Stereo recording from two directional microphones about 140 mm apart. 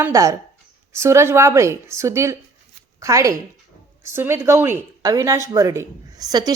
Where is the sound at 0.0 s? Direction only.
25° right (ahead or behind).